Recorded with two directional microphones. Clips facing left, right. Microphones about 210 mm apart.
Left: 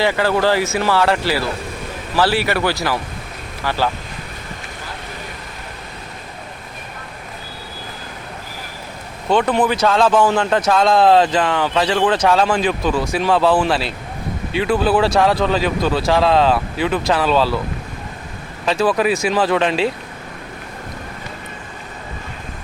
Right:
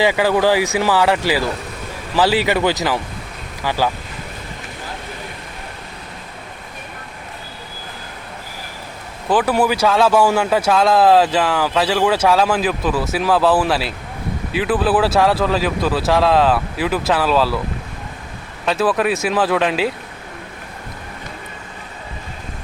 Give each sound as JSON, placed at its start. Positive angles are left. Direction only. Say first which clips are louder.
{"t": 0.0, "sound": "speech", "louder": "right 1 dB", "side_deg": -10}
{"t": 9.3, "sound": "speech", "louder": "even", "side_deg": -5}
{"t": 18.6, "sound": "speech", "louder": "left 1 dB", "side_deg": 0}